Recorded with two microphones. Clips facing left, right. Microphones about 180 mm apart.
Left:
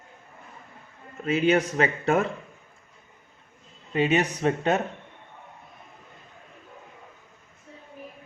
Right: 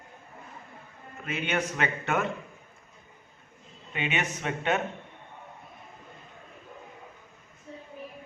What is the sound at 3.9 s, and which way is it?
Speech, 40° left (ahead or behind).